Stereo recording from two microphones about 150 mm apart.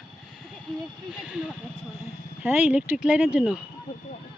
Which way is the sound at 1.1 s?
10° right (ahead or behind).